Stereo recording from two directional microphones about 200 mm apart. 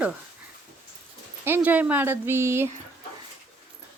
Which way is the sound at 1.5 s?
10° right (ahead or behind).